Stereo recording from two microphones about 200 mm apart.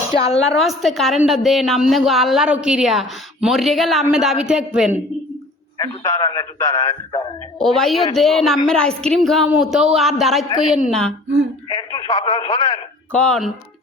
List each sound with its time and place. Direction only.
0.1 s a woman's voice: 30° left (ahead or behind)
0.5 s a woman's voice: centre (ahead or behind)
5.8 s speech: 20° left (ahead or behind)
7.6 s a woman's voice: centre (ahead or behind)
11.7 s speech: 20° left (ahead or behind)
13.1 s speech: 5° left (ahead or behind)